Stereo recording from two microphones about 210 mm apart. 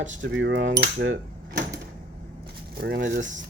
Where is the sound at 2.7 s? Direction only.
50° right (ahead or behind).